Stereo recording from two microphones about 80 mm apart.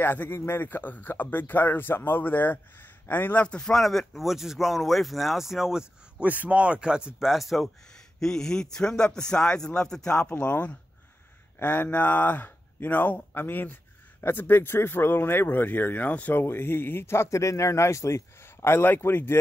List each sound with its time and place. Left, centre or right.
0.0 s speech: left
3.4 s speech: centre; by 19.3 s left